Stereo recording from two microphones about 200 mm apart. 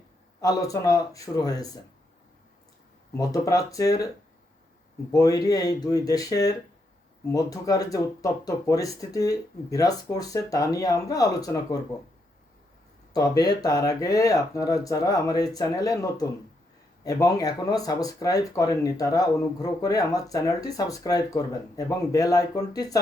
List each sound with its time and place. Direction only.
0.4 s speech: 15° left (ahead or behind)
3.1 s speech: 15° left (ahead or behind)
5.1 s speech: 20° left (ahead or behind)
13.1 s speech: 20° left (ahead or behind)